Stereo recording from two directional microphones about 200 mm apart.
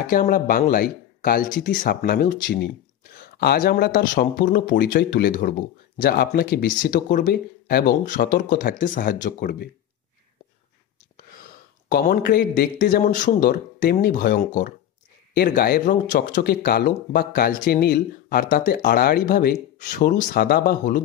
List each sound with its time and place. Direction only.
0.0 s speech: 45° left (ahead or behind)
11.9 s speech: 50° left (ahead or behind)